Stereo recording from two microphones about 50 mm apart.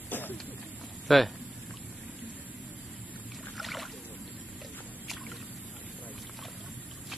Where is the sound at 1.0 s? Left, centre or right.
Centre.